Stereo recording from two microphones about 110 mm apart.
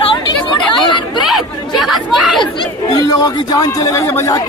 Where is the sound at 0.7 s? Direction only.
45° left (ahead or behind).